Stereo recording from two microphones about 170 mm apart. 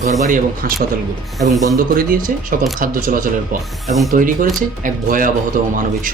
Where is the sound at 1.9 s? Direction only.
55° right (ahead or behind).